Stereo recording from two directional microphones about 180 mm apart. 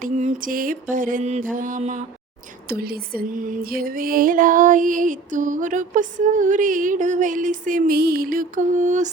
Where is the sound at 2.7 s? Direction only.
60° right (ahead or behind).